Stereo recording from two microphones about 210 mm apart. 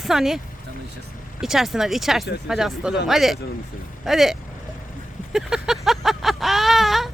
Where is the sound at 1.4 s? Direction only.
Centre (ahead or behind).